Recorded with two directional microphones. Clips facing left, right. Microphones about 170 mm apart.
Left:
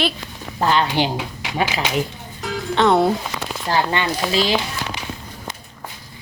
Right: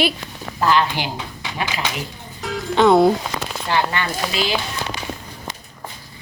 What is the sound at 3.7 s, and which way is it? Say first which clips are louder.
Speech: even; 40° left (ahead or behind).